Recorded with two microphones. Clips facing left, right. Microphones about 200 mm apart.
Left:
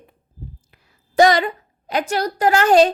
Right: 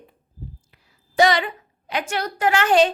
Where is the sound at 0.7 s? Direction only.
45° left (ahead or behind).